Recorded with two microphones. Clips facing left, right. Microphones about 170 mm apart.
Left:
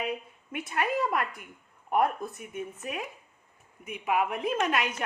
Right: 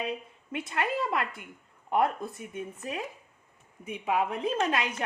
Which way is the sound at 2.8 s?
25° right (ahead or behind).